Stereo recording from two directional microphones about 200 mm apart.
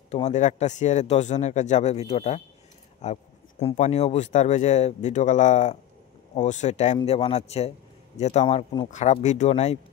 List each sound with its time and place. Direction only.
0.1 s speech: 35° left (ahead or behind)